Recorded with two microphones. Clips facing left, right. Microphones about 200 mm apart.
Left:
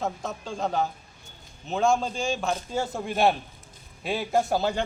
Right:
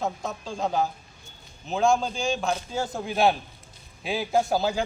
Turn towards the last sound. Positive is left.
turn(degrees=0)  # may be behind; listen again after turning